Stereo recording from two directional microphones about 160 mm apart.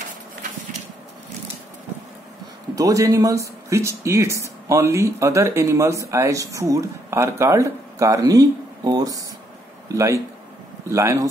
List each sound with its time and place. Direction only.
2.7 s speech: 20° right (ahead or behind)